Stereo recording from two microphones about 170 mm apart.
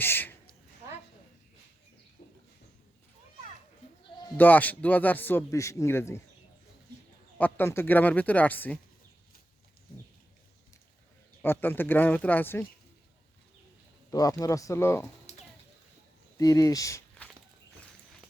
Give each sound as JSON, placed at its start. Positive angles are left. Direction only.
{"t": 0.0, "sound": "a woman's voice", "side_deg": 10}
{"t": 4.4, "sound": "a man's voice", "side_deg": 10}
{"t": 7.3, "sound": "a man's voice", "side_deg": 10}
{"t": 11.4, "sound": "a man's voice", "side_deg": 10}
{"t": 14.1, "sound": "speech", "side_deg": 20}
{"t": 16.4, "sound": "speech", "side_deg": 20}